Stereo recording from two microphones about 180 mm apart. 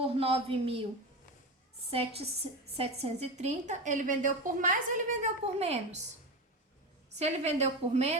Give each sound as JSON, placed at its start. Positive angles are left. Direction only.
{"t": 0.0, "sound": "a woman's voice", "side_deg": -30}
{"t": 1.9, "sound": "a woman's voice", "side_deg": -35}
{"t": 7.2, "sound": "a woman's voice", "side_deg": -40}